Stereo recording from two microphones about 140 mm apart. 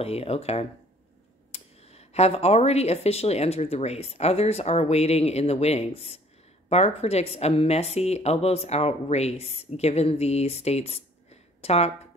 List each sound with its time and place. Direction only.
0.0 s speech: 45° left (ahead or behind)